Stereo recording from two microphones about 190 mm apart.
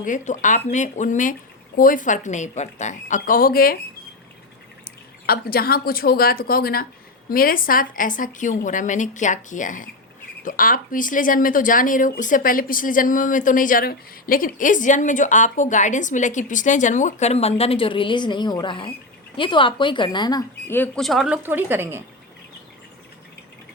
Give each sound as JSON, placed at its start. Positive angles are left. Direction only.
{"t": 0.0, "sound": "speech", "side_deg": 40}
{"t": 5.2, "sound": "a woman's voice", "side_deg": 55}
{"t": 21.4, "sound": "speech", "side_deg": -10}